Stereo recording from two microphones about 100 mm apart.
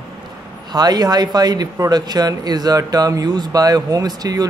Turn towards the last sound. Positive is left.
turn(degrees=-40)  # may be behind; listen again after turning